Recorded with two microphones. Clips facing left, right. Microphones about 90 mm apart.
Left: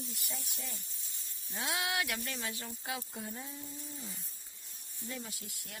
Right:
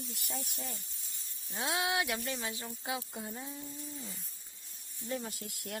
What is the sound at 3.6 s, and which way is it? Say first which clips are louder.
Speech: right 2 dB; centre (ahead or behind).